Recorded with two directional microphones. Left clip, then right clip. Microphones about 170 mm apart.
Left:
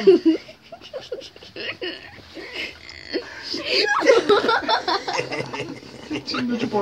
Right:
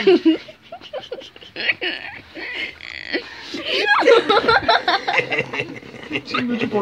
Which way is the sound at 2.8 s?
40° right (ahead or behind).